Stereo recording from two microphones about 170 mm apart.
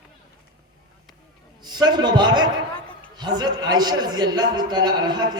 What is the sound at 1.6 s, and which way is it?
A man's voice, 25° right (ahead or behind).